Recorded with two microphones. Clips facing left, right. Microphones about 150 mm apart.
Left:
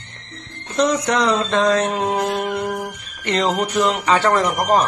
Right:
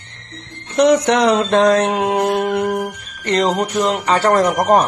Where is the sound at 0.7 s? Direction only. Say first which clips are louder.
Right 5 dB; 75° right (ahead or behind).